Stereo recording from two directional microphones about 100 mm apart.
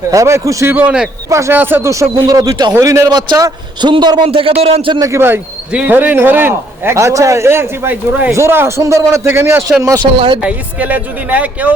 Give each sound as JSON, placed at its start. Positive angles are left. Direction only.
{"t": 0.1, "sound": "a man's voice", "side_deg": -30}
{"t": 1.9, "sound": "speech", "side_deg": -35}
{"t": 3.1, "sound": "a man's voice", "side_deg": -45}
{"t": 4.3, "sound": "speech", "side_deg": -70}
{"t": 4.9, "sound": "a man's voice", "side_deg": -30}
{"t": 9.8, "sound": "speech", "side_deg": -35}
{"t": 10.2, "sound": "speech", "side_deg": -60}
{"t": 10.4, "sound": "speech", "side_deg": -15}